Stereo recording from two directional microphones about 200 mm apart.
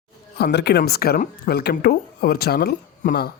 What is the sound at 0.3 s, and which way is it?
Speech, 55° left (ahead or behind).